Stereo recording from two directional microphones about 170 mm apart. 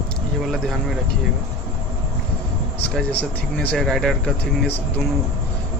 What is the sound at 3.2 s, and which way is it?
Speech, 5° left (ahead or behind).